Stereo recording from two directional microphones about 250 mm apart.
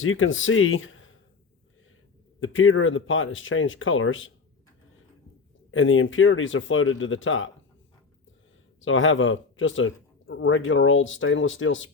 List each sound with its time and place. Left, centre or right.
0.0 s speech: left
2.4 s speech: left
5.7 s speech: left
8.8 s speech: left